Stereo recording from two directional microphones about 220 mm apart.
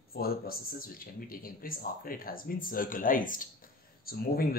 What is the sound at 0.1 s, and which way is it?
A man's voice, 45° left (ahead or behind).